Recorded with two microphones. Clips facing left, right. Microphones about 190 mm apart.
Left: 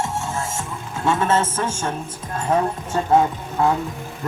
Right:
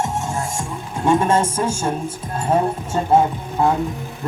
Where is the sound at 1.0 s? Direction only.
15° right (ahead or behind).